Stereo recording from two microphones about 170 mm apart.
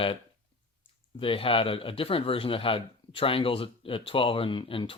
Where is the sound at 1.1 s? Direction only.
30° left (ahead or behind).